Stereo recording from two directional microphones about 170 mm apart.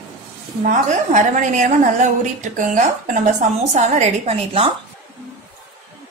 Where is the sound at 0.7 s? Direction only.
45° right (ahead or behind).